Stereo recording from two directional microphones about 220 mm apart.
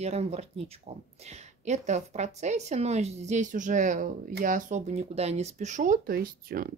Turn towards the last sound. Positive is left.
turn(degrees=-40)  # may be behind; listen again after turning